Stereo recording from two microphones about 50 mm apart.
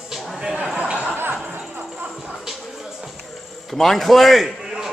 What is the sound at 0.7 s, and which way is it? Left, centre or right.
Chatter, right.